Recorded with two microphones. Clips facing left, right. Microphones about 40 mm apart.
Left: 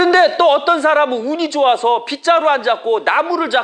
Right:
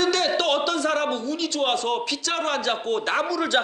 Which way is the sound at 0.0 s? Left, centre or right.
Left.